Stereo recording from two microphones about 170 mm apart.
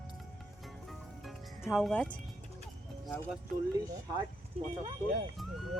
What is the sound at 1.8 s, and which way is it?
Speech, 5° left (ahead or behind).